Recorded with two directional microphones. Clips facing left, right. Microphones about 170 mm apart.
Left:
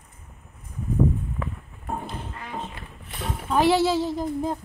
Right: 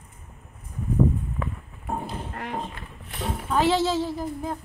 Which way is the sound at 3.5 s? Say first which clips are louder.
Left 2 dB; 10° left (ahead or behind).